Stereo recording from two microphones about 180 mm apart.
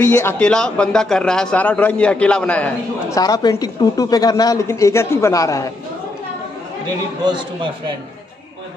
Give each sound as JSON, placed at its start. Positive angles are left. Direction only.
{"t": 0.0, "sound": "a man's voice", "side_deg": 10}
{"t": 3.2, "sound": "a woman's voice", "side_deg": 20}
{"t": 7.2, "sound": "a man's voice", "side_deg": -25}